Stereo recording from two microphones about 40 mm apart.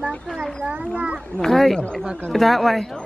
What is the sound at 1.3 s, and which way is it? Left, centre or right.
Speech, centre.